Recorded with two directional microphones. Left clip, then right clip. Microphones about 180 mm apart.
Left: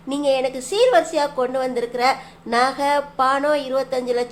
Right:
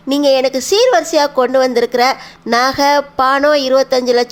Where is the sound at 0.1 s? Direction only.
40° right (ahead or behind).